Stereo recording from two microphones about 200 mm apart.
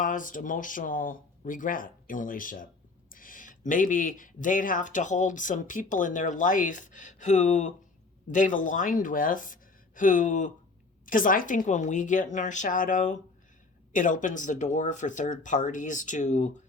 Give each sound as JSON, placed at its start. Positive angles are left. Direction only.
{"t": 0.0, "sound": "speech", "side_deg": 40}